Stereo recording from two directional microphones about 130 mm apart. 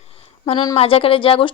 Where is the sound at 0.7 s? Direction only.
45° left (ahead or behind).